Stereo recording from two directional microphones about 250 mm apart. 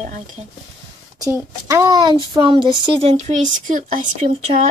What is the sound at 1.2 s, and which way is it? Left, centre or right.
A woman's voice, centre.